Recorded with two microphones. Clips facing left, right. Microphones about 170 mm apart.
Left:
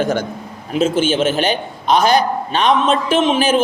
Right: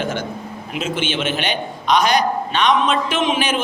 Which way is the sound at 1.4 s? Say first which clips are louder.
Left 4 dB; 30° left (ahead or behind).